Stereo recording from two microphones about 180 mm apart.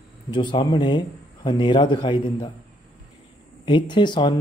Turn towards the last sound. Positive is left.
turn(degrees=25)  # may be behind; listen again after turning